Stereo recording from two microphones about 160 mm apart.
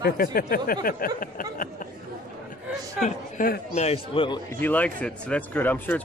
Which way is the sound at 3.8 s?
35° left (ahead or behind).